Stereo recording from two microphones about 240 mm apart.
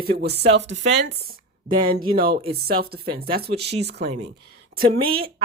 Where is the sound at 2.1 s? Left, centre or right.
Right.